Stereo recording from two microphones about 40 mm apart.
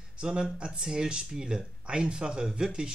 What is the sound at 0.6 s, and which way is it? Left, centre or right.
Speech, centre.